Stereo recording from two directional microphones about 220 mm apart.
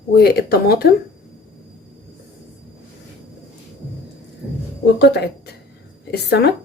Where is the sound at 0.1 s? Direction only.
45° left (ahead or behind).